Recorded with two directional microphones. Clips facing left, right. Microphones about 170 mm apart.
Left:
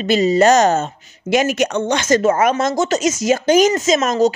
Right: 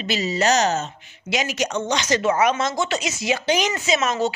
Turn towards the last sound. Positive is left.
turn(degrees=40)  # may be behind; listen again after turning